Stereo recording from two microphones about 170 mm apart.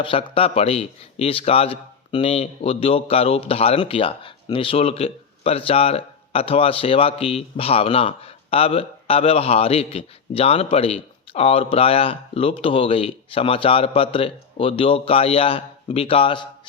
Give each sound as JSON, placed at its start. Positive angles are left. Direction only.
{"t": 0.0, "sound": "speech", "side_deg": 30}